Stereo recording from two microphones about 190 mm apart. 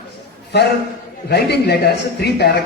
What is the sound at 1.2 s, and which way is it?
A man's voice, 60° left (ahead or behind).